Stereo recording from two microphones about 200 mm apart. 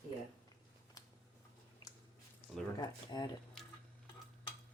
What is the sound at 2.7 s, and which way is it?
Speech, 20° left (ahead or behind).